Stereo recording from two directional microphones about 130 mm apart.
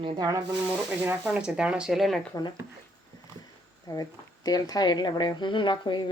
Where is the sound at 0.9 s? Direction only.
15° right (ahead or behind).